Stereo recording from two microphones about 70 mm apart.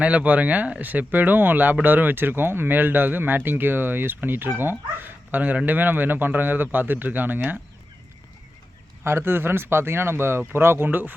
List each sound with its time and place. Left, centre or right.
0.0 s speech: centre
9.0 s speech: right